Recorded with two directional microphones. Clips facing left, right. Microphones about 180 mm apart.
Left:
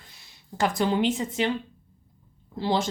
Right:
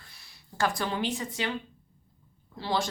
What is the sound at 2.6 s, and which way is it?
Speech, 25° left (ahead or behind).